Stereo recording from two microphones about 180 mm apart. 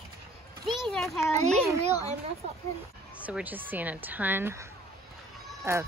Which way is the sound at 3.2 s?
10° right (ahead or behind).